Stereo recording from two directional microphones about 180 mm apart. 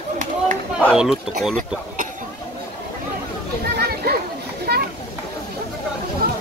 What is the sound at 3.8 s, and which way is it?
Children playing, 60° right (ahead or behind).